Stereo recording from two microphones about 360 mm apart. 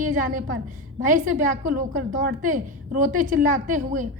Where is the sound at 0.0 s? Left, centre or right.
Right.